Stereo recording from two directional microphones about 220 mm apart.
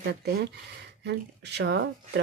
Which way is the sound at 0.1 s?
45° right (ahead or behind).